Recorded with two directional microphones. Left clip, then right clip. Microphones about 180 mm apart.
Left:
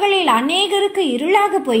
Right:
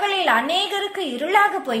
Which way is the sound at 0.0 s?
5° right (ahead or behind).